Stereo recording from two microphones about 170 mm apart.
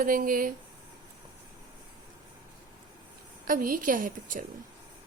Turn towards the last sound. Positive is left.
turn(degrees=-50)  # may be behind; listen again after turning